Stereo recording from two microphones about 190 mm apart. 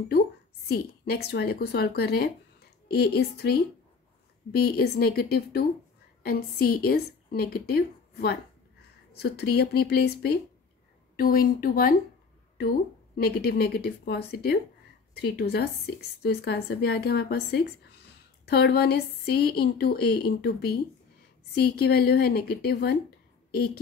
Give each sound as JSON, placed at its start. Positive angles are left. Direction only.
{"t": 0.7, "sound": "a woman's voice", "side_deg": 55}